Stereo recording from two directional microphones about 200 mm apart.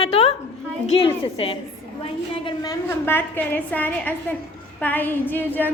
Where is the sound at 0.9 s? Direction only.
30° left (ahead or behind).